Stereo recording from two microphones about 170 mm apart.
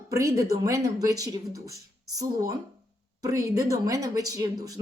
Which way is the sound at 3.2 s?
20° right (ahead or behind).